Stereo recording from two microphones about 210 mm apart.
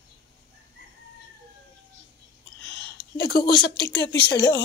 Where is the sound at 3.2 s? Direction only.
45° left (ahead or behind).